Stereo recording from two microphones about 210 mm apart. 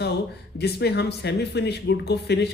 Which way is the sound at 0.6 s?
50° left (ahead or behind).